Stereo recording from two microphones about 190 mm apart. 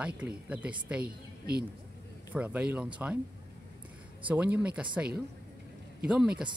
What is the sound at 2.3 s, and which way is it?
Speech, 5° right (ahead or behind).